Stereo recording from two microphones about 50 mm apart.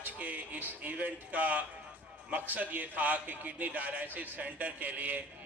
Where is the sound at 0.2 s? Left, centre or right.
Right.